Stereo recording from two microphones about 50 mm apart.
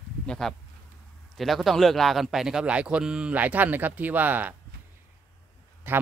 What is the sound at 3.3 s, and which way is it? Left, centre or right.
Speech, right.